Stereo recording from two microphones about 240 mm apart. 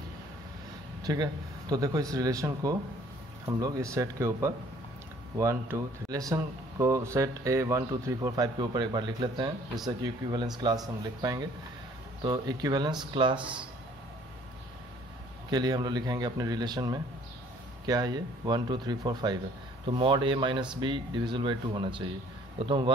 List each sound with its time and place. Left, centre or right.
1.0 s speech: centre
15.5 s speech: centre